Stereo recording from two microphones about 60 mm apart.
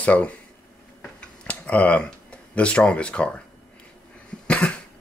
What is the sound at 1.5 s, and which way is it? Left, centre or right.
Speech, left.